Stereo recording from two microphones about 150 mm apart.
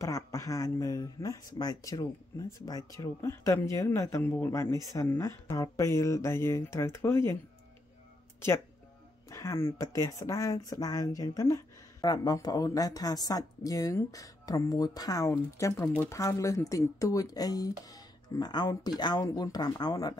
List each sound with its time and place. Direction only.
0.0 s speech: 20° left (ahead or behind)
9.3 s speech: 20° left (ahead or behind)